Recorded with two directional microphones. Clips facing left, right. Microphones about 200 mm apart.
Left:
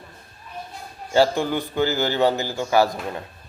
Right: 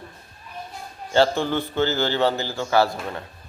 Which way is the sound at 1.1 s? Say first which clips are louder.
Left 1 dB; 10° left (ahead or behind).